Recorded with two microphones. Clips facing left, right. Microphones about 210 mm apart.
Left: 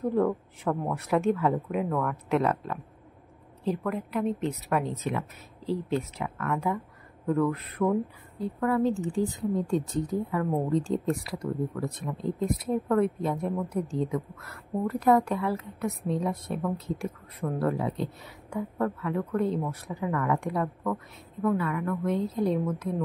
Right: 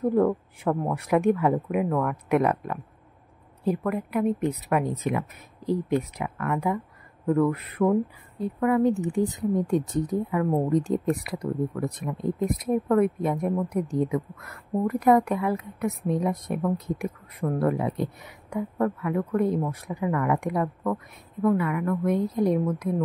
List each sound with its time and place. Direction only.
0.0 s a woman's voice: 10° right (ahead or behind)
8.9 s speech: 60° right (ahead or behind)
9.6 s a woman's voice: 20° right (ahead or behind)